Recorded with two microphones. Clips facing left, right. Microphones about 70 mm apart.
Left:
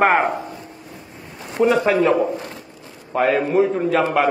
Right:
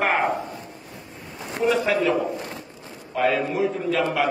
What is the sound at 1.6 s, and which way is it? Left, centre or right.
A man's voice, left.